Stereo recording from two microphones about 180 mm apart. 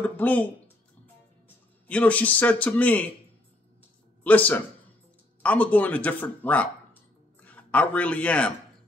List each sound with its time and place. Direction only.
0.0 s speech: 10° left (ahead or behind)
1.9 s speech: 5° left (ahead or behind)
4.2 s a man's voice: 10° left (ahead or behind)